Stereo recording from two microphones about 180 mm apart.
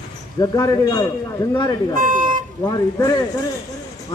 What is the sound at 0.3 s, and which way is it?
Speech, 20° left (ahead or behind).